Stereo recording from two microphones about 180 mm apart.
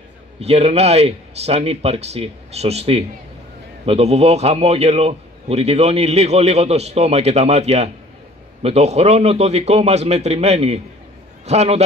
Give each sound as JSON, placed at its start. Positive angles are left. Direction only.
{"t": 0.4, "sound": "a man's voice", "side_deg": -35}